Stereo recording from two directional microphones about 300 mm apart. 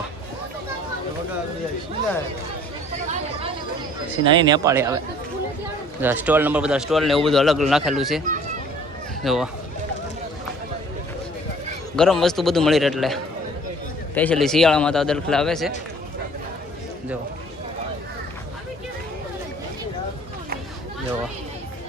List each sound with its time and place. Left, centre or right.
2.9 s chatter: right
4.2 s speech: centre
6.0 s a man's voice: centre
9.2 s a man's voice: centre
11.9 s a man's voice: centre
14.2 s a man's voice: centre